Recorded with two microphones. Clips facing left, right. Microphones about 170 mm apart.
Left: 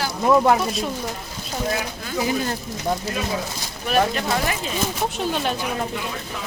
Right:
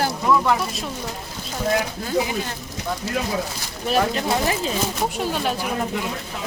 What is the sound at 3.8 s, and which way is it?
Speech, 25° right (ahead or behind).